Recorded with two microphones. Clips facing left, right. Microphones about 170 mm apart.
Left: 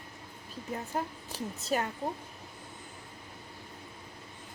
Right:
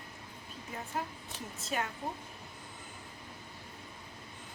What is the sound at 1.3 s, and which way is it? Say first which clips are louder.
Speech: left 5 dB; 40° left (ahead or behind).